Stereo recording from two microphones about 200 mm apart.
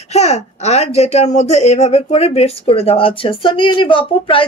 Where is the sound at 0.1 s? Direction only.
35° left (ahead or behind).